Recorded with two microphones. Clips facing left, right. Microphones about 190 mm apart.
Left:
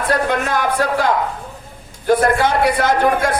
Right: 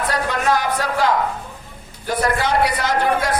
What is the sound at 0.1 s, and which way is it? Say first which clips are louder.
A man's voice: left 3 dB; 55° left (ahead or behind).